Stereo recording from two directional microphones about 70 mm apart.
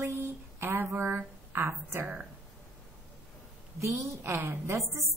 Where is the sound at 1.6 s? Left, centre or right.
Right.